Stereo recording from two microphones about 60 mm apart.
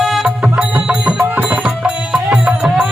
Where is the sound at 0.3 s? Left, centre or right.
Centre.